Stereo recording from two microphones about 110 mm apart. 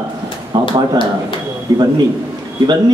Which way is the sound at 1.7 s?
35° right (ahead or behind).